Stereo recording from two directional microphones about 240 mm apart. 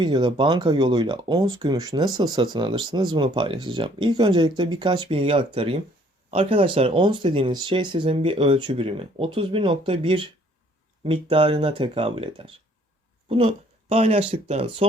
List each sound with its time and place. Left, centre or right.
0.0 s speech: centre